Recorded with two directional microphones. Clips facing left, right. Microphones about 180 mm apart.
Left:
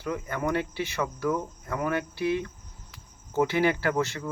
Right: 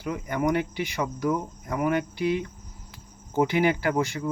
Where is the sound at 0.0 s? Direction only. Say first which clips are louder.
Right 3 dB; 15° right (ahead or behind).